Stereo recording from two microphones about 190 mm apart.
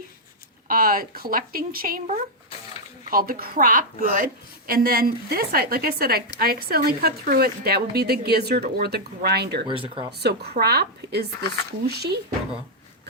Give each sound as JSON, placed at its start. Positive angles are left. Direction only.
{"t": 0.7, "sound": "a woman's voice", "side_deg": -50}
{"t": 9.8, "sound": "speech", "side_deg": -25}
{"t": 10.1, "sound": "a woman's voice", "side_deg": -60}